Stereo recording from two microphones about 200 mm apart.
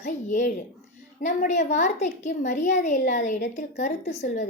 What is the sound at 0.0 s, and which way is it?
A woman's voice, 40° left (ahead or behind).